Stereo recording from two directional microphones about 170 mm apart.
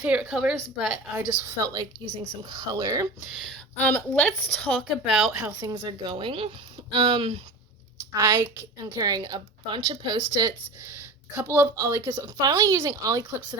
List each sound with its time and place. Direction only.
0.0 s a woman's voice: 5° right (ahead or behind)
1.4 s speech: 20° right (ahead or behind)
3.8 s a woman's voice: 10° left (ahead or behind)
5.5 s speech: 25° right (ahead or behind)
8.1 s a woman's voice: 15° right (ahead or behind)
11.3 s a woman's voice: 15° right (ahead or behind)